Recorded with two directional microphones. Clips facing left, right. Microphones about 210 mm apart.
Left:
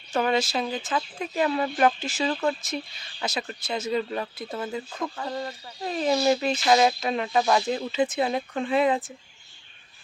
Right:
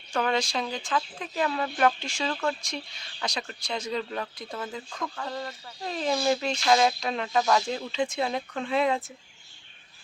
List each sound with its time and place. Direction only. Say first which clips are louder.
0.2 s speech: left 3 dB; 5° left (ahead or behind)
2.3 s speech: left 2 dB; 15° left (ahead or behind)
2.6 s speech: left 4 dB; 5° left (ahead or behind)